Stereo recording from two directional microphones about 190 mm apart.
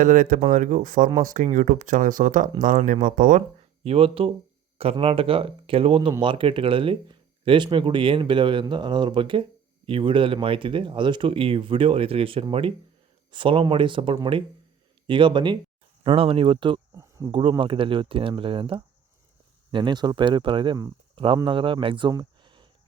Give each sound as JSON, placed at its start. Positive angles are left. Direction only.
{"t": 0.0, "sound": "speech", "side_deg": -45}
{"t": 3.8, "sound": "speech", "side_deg": -30}